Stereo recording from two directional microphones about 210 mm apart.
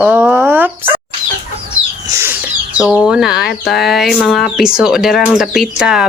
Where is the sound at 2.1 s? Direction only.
10° right (ahead or behind).